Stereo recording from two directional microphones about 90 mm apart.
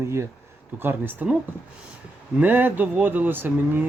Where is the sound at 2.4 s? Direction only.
20° right (ahead or behind).